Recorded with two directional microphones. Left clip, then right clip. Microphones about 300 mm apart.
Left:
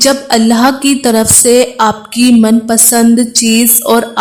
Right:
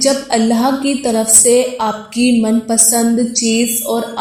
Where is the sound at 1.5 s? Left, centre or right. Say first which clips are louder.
Left 7 dB; left.